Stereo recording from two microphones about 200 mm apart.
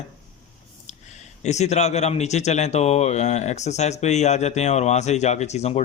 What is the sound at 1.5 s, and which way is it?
A man's voice, 35° left (ahead or behind).